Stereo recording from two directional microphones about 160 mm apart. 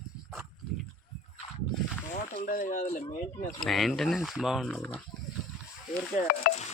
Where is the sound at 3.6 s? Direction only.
Centre (ahead or behind).